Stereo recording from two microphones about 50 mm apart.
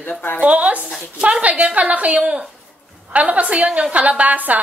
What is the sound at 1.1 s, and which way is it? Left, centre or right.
Speech, centre.